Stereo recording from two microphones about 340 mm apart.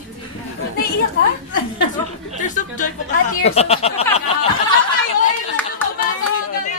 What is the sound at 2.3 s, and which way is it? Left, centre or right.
Speech, left.